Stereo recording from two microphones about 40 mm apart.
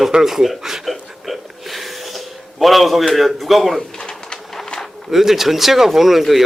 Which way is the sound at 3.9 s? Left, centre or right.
Centre.